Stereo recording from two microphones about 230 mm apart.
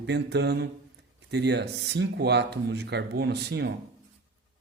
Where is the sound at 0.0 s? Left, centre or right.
Right.